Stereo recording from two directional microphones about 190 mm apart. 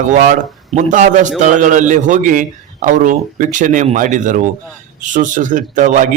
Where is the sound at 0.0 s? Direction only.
40° right (ahead or behind).